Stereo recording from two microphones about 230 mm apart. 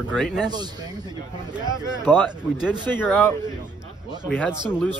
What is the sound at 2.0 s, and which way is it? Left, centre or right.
Speech, centre.